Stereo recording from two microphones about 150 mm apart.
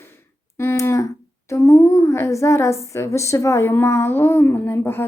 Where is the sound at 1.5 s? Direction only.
15° left (ahead or behind).